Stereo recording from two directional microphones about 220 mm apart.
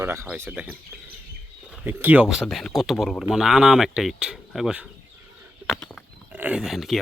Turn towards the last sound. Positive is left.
turn(degrees=0)  # may be behind; listen again after turning